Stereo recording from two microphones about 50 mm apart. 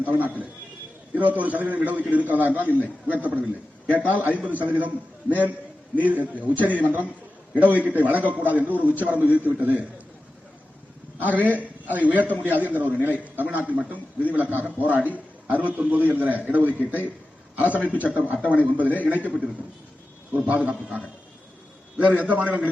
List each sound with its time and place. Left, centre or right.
0.0 s a man's voice: right
6.1 s a man's voice: right
11.2 s a man's voice: right
20.3 s a man's voice: right